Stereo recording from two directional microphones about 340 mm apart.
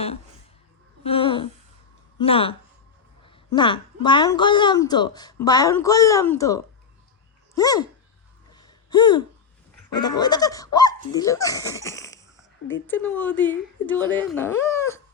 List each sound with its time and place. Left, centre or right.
1.0 s a woman's voice: centre
8.5 s gasp: centre
9.9 s a woman's voice: centre